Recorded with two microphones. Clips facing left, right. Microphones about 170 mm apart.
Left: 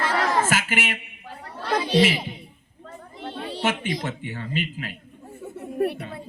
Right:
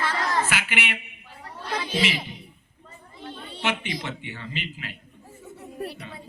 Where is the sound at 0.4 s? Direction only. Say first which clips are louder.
Left 4 dB; 45° left (ahead or behind).